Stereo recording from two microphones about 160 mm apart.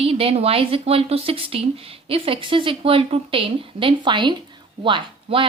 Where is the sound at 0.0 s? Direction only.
40° right (ahead or behind).